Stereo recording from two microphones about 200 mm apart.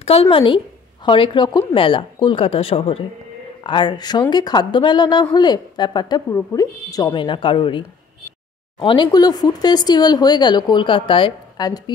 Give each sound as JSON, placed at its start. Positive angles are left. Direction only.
{"t": 0.0, "sound": "a woman's voice", "side_deg": 30}